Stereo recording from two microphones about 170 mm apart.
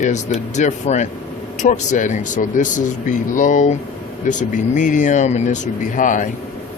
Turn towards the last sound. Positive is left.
turn(degrees=50)  # may be behind; listen again after turning